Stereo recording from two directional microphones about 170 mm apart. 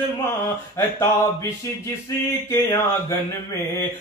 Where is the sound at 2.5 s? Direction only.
15° left (ahead or behind).